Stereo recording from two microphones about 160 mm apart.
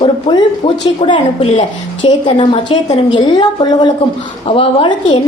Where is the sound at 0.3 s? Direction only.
40° left (ahead or behind).